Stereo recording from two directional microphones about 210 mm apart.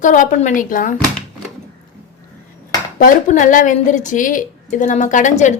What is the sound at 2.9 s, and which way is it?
A woman's voice, 40° left (ahead or behind).